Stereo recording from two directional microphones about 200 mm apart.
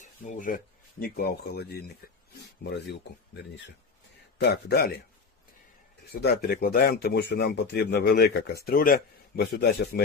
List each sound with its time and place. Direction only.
0.0 s a man's voice: 40° left (ahead or behind); by 2.9 s 55° left (ahead or behind)
4.4 s a man's voice: 55° left (ahead or behind)
6.1 s speech: 55° left (ahead or behind)